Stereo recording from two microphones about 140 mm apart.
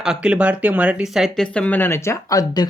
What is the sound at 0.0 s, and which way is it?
Speech, 5° right (ahead or behind).